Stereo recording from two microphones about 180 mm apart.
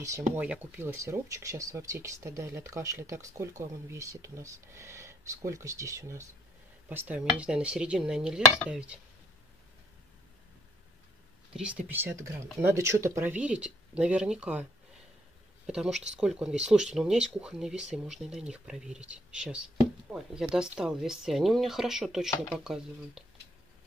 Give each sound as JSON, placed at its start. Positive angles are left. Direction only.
{"t": 0.4, "sound": "speech", "side_deg": -10}
{"t": 11.5, "sound": "speech", "side_deg": -5}